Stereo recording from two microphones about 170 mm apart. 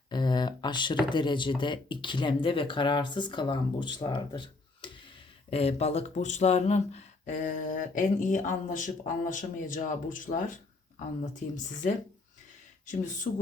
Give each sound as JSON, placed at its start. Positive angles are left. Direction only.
{"t": 0.1, "sound": "speech", "side_deg": 25}